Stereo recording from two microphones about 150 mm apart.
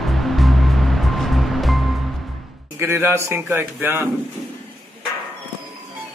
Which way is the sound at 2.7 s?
15° right (ahead or behind).